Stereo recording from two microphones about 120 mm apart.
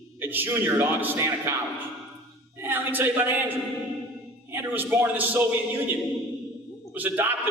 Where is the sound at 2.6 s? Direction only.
15° right (ahead or behind).